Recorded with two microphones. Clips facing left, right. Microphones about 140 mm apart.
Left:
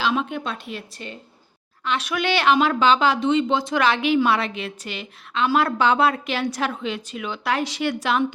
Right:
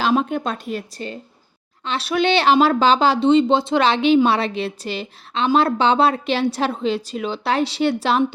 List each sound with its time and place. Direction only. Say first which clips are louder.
0.0 s speech: right 5 dB; 40° right (ahead or behind)